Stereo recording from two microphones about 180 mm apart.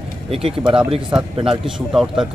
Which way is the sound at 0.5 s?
5° right (ahead or behind).